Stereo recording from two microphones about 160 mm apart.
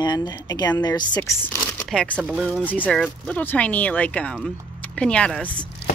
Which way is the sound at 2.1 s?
10° right (ahead or behind).